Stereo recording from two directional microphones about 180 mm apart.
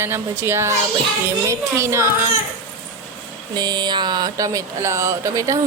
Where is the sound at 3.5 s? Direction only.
20° right (ahead or behind).